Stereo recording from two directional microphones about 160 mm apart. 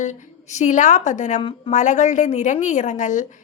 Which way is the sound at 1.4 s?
35° left (ahead or behind).